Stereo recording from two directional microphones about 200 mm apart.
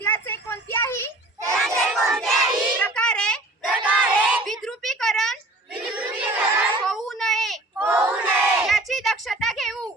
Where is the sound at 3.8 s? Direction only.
10° right (ahead or behind).